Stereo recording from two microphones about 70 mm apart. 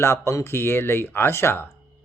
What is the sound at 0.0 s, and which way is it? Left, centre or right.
Speech, left.